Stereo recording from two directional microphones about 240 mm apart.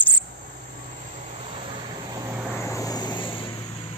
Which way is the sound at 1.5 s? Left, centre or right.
Centre.